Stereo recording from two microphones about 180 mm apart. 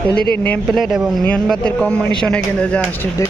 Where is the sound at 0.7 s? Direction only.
Centre (ahead or behind).